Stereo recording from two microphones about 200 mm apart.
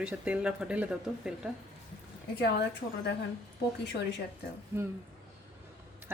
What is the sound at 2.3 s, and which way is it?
Speech, 60° left (ahead or behind).